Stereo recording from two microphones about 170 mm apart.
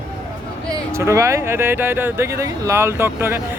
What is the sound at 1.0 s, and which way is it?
Speech, 15° right (ahead or behind).